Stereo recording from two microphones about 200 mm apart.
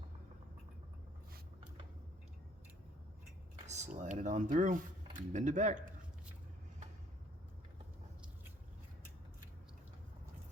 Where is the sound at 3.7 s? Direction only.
35° right (ahead or behind).